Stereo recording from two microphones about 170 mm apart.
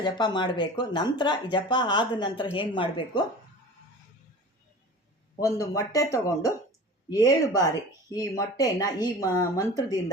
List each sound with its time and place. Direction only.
0.0 s speech: 25° left (ahead or behind)
5.4 s a woman's voice: 20° left (ahead or behind)